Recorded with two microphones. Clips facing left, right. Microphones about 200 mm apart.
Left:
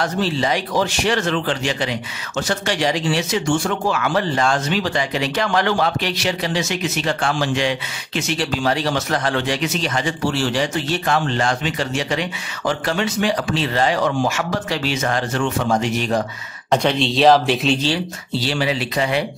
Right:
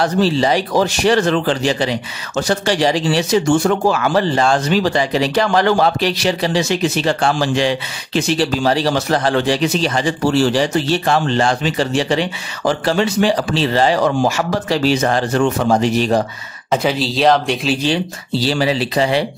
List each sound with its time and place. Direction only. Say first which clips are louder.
0.0 s speech: right 5 dB; 35° right (ahead or behind)
16.7 s speech: even; 5° right (ahead or behind)
18.3 s speech: right 4 dB; 35° right (ahead or behind)